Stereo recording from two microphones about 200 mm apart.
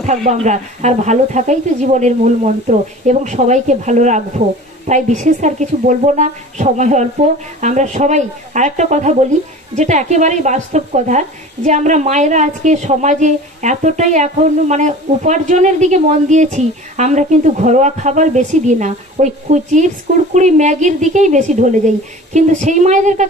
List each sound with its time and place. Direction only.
0.0 s speech: 35° right (ahead or behind)